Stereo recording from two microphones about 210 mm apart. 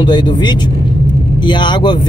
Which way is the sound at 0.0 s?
20° left (ahead or behind).